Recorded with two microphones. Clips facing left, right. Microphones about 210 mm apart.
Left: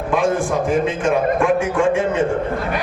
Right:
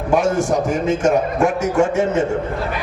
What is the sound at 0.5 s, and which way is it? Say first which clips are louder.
A man's voice: even; 40° right (ahead or behind).